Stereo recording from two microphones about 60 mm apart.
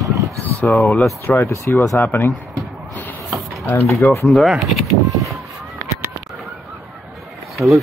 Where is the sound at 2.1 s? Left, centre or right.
Left.